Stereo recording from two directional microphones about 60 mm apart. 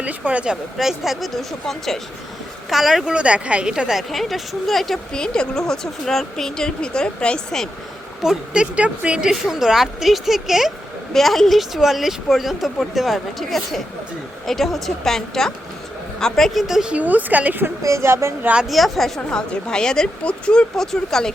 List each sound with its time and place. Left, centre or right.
0.0 s a woman's voice: right
0.5 s speech: centre
3.1 s a woman's voice: centre
3.9 s speech: centre
5.1 s speech: centre
8.2 s a woman's voice: centre
8.7 s a woman's voice: centre
16.6 s a woman's voice: centre
16.9 s a woman's voice: right
17.8 s speech: right
18.7 s speech: centre